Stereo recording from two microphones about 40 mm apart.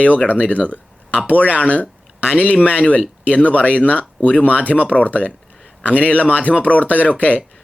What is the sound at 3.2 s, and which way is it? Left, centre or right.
Speech, left.